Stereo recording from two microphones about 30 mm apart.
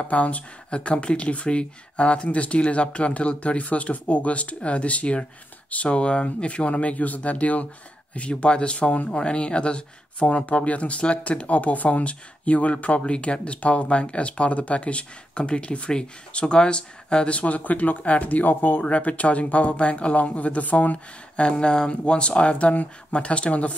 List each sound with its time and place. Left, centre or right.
0.1 s speech: left
0.7 s speech: left
5.9 s speech: left
8.1 s speech: left
12.0 s speech: left
12.8 s speech: left
17.6 s speech: left
18.0 s speech: left
18.9 s speech: left
21.4 s speech: left